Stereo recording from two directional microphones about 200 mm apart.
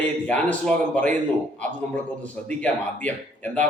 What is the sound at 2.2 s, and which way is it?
A man's voice, 5° left (ahead or behind).